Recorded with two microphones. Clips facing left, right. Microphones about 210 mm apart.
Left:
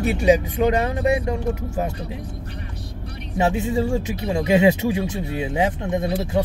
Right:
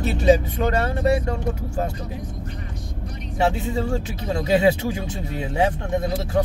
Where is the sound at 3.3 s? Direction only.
20° left (ahead or behind).